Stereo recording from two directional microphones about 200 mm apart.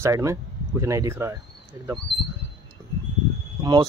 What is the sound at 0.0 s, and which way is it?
Speech, 15° right (ahead or behind).